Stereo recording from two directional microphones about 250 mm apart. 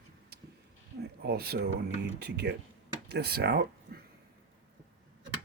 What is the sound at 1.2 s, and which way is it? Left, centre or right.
A man's voice, right.